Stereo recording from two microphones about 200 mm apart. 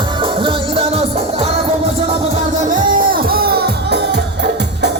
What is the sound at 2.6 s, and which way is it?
Music, 40° right (ahead or behind).